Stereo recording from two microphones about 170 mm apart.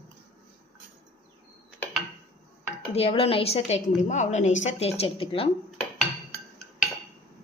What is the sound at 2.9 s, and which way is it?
A woman's voice, 35° left (ahead or behind).